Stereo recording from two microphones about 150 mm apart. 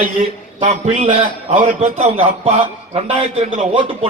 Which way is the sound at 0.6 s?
50° right (ahead or behind).